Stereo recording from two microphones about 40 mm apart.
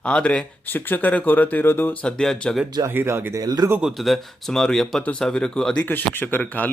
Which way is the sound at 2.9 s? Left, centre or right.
Right.